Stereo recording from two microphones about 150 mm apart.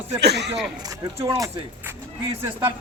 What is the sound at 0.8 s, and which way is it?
Speech, 25° right (ahead or behind).